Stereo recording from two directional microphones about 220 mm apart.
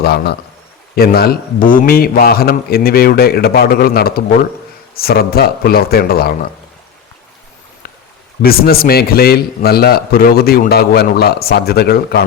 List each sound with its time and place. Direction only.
0.0 s a man's voice: 45° left (ahead or behind)
8.4 s a man's voice: 45° left (ahead or behind)